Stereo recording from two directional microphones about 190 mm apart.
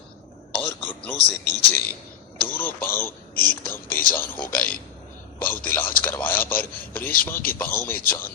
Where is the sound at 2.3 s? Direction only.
10° left (ahead or behind).